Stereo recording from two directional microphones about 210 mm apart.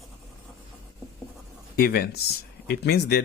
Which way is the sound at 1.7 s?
45° left (ahead or behind).